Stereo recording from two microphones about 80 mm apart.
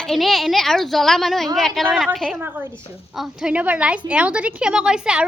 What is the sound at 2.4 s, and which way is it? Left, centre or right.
Speech, right.